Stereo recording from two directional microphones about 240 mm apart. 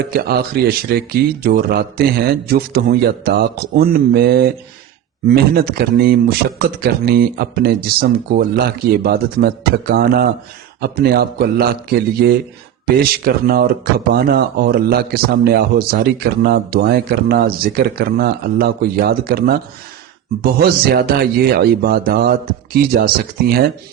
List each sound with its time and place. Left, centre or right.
0.0 s speech: right